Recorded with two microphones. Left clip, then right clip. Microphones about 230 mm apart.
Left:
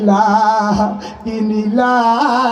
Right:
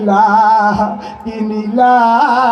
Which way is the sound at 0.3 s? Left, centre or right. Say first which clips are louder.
Right 3 dB; left.